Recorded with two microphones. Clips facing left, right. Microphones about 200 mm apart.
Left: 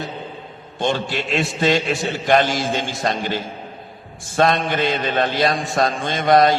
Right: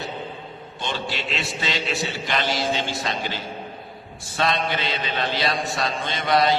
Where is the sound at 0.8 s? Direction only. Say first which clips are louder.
Left 8 dB; 50° left (ahead or behind).